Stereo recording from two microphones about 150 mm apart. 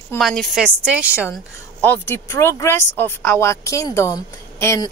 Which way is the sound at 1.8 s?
10° left (ahead or behind).